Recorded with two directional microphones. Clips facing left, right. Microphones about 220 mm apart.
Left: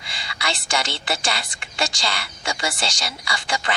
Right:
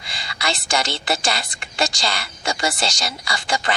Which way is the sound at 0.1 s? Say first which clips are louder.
Right 2 dB; 40° right (ahead or behind).